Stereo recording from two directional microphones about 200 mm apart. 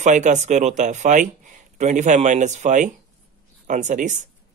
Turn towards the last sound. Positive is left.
turn(degrees=-40)  # may be behind; listen again after turning